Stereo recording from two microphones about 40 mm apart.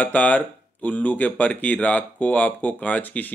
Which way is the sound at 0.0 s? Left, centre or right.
Left.